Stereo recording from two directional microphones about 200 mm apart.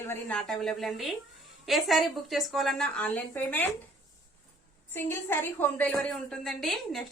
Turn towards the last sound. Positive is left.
turn(degrees=0)  # may be behind; listen again after turning